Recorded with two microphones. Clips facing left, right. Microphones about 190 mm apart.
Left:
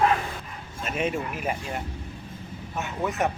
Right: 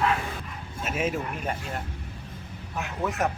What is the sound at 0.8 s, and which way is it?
Speech, 5° right (ahead or behind).